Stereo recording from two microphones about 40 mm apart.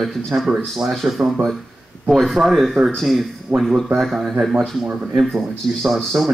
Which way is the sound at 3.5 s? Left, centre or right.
Right.